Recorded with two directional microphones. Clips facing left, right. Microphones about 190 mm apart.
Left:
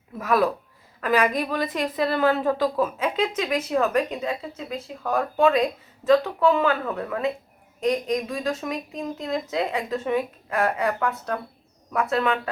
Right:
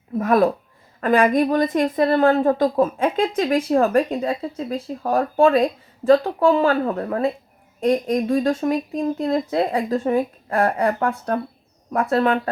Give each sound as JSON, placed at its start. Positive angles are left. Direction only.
{"t": 0.2, "sound": "a woman's voice", "side_deg": -45}
{"t": 9.0, "sound": "a woman's voice", "side_deg": -45}
{"t": 9.6, "sound": "a woman's voice", "side_deg": -35}